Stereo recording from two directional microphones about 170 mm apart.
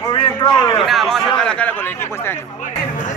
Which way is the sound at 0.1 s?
25° left (ahead or behind).